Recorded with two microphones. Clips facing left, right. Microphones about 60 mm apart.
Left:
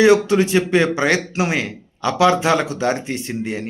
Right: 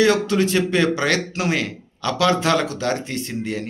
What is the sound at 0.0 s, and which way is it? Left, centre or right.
Speech, centre.